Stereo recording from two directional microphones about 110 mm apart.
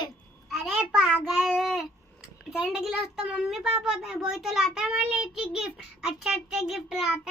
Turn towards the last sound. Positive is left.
turn(degrees=-10)  # may be behind; listen again after turning